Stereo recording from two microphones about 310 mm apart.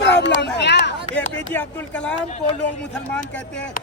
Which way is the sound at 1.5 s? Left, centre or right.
Centre.